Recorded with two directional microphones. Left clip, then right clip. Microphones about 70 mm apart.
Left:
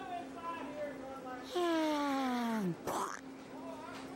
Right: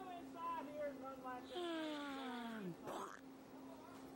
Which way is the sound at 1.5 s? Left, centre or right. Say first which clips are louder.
Left 14 dB; left.